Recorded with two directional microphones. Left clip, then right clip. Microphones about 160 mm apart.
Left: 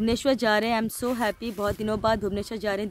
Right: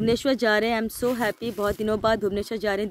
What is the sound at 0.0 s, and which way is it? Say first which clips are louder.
Speech: right 1 dB; 10° right (ahead or behind).